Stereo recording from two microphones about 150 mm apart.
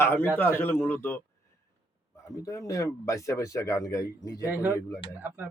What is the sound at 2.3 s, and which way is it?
Speech, 20° left (ahead or behind).